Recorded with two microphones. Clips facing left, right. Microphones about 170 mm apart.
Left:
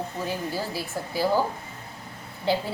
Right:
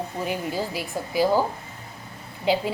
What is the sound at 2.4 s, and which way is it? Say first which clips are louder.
Speech: right 3 dB; 15° right (ahead or behind).